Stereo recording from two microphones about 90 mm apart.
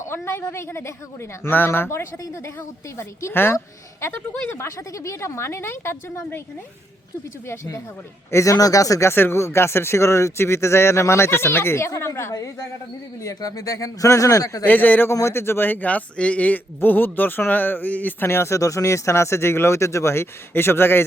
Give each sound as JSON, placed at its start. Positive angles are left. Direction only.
{"t": 0.5, "sound": "a man's voice", "side_deg": 30}
{"t": 7.4, "sound": "speech", "side_deg": 30}
{"t": 14.6, "sound": "a man's voice", "side_deg": 20}